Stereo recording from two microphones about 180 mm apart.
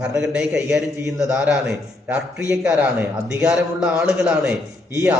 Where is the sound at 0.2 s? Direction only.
5° right (ahead or behind).